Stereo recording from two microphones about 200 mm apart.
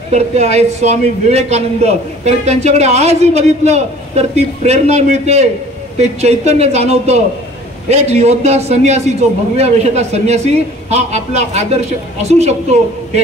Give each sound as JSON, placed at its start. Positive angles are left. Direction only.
{"t": 0.1, "sound": "a man's voice", "side_deg": -35}